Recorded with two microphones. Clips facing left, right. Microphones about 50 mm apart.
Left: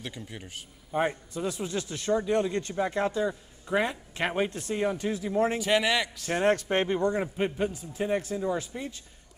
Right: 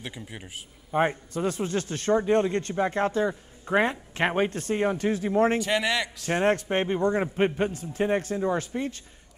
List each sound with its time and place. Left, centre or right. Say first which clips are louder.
0.0 s a man's voice: right 1 dB; centre
0.9 s speech: right 3 dB; right
4.5 s speech: right 3 dB; right
5.6 s a man's voice: even; centre
6.4 s speech: even; right
7.7 s a man's voice: right 3 dB; right